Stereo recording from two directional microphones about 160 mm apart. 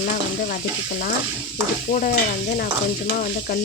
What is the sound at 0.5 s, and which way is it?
Stir, 70° left (ahead or behind).